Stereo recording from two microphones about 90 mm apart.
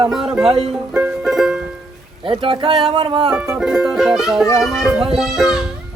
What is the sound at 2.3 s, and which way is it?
Speech, 80° right.